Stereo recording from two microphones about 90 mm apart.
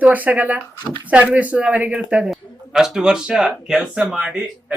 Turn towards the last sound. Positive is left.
turn(degrees=-5)  # may be behind; listen again after turning